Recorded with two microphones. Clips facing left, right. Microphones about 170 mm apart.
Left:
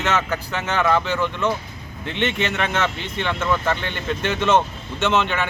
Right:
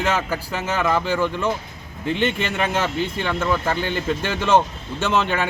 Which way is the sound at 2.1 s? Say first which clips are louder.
Right 1 dB; 40° right (ahead or behind).